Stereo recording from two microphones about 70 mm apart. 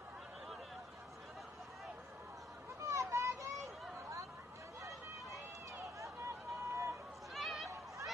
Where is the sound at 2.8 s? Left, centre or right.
Right.